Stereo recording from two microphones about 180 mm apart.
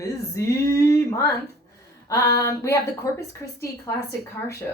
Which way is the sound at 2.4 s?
15° left (ahead or behind).